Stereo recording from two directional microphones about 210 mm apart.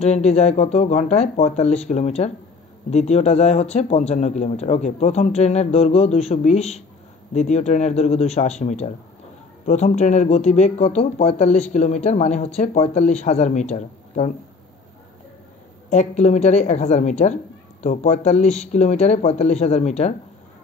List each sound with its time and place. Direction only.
0.0 s speech: 30° left (ahead or behind)
15.9 s speech: 35° left (ahead or behind)